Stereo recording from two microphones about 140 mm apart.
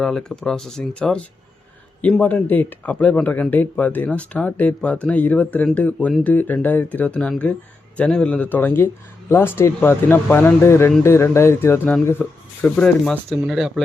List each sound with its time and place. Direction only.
0.0 s speech: 5° left (ahead or behind)